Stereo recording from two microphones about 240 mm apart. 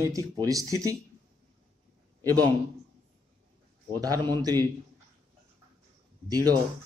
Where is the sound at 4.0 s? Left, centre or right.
Centre.